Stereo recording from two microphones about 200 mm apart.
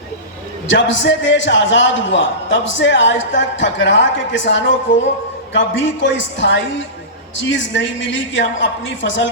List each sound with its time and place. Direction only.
0.7 s a man's voice: 65° left (ahead or behind)